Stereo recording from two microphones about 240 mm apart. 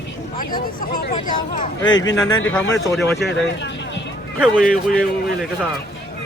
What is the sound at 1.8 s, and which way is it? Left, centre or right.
Speech, centre.